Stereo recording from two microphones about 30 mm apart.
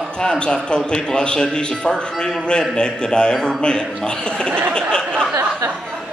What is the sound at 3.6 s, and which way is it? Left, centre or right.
Speech, left.